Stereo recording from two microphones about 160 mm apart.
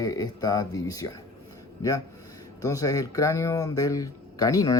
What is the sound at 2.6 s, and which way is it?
Speech, 20° left (ahead or behind).